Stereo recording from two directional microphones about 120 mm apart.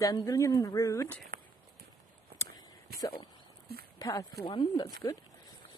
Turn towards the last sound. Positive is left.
turn(degrees=30)  # may be behind; listen again after turning